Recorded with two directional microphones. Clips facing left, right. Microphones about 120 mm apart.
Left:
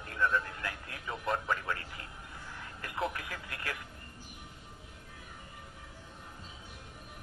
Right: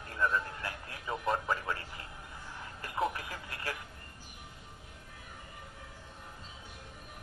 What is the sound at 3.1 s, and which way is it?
Radio, 35° right (ahead or behind).